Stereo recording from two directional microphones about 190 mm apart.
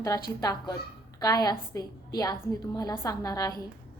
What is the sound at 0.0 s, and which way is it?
A woman's voice, 15° left (ahead or behind).